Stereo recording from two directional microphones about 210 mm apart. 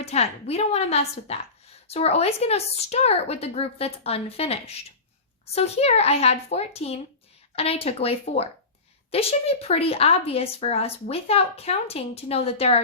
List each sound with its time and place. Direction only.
0.0 s a woman's voice: 30° left (ahead or behind)